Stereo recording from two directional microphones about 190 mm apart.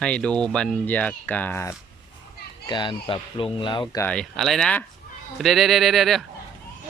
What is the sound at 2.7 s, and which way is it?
Speech, 25° left (ahead or behind).